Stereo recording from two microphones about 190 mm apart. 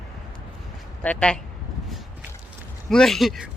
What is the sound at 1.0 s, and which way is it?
Speech, 5° left (ahead or behind).